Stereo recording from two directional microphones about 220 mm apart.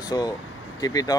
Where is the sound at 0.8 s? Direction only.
15° left (ahead or behind).